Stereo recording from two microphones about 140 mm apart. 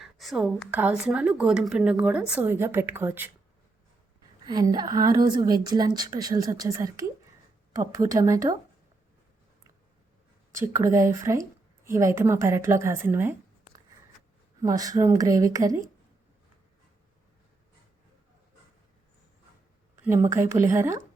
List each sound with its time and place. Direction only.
0.0 s speech: centre (ahead or behind)
4.4 s a woman's voice: 30° right (ahead or behind)
10.5 s a woman's voice: 20° right (ahead or behind)
14.6 s a woman's voice: 25° right (ahead or behind)
20.1 s a woman's voice: 20° right (ahead or behind)